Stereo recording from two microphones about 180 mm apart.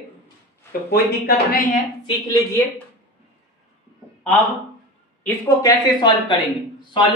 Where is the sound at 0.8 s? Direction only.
60° left (ahead or behind).